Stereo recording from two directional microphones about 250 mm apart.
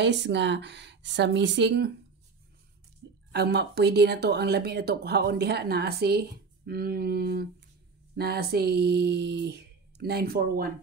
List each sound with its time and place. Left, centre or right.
0.0 s speech: right
3.3 s speech: right